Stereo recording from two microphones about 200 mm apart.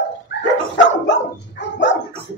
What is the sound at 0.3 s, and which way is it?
Dog, 60° left (ahead or behind).